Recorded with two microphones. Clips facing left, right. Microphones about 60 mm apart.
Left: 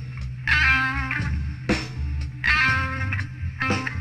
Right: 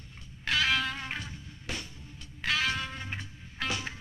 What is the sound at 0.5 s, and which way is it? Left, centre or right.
Music, left.